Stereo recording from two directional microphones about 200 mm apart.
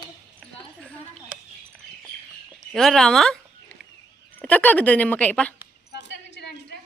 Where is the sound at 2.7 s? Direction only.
Centre (ahead or behind).